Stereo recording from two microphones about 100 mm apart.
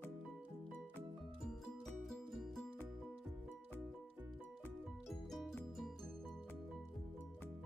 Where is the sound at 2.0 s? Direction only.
Centre (ahead or behind).